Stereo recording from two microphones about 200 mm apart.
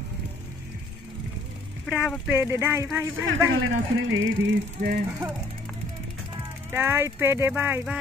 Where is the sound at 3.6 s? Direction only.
75° right (ahead or behind).